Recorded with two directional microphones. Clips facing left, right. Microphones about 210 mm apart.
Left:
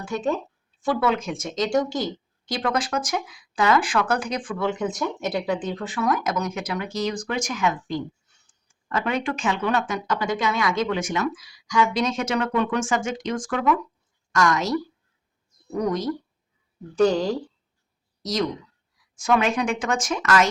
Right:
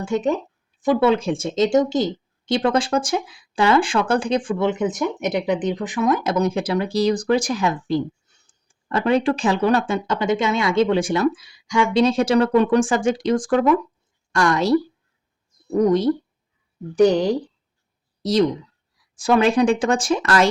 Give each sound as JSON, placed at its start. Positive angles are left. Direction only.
{"t": 0.0, "sound": "speech", "side_deg": -20}
{"t": 16.9, "sound": "a woman's voice", "side_deg": -15}
{"t": 18.2, "sound": "speech", "side_deg": -30}